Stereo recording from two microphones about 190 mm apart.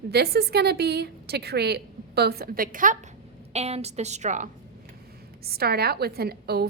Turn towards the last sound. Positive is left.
turn(degrees=-55)  # may be behind; listen again after turning